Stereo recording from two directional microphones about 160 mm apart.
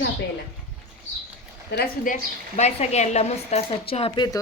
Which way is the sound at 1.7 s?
80° left.